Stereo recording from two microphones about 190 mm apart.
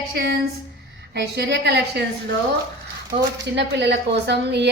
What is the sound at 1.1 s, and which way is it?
Speech, 60° right (ahead or behind).